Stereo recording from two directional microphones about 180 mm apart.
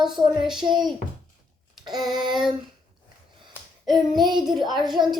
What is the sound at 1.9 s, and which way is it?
Speech, centre (ahead or behind).